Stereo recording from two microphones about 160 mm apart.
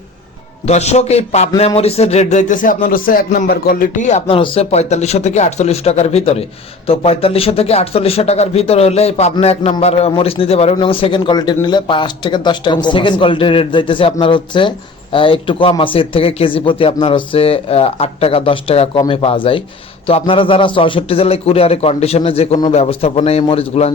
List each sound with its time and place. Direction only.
0.7 s speech: 45° left (ahead or behind)
4.3 s speech: 35° left (ahead or behind)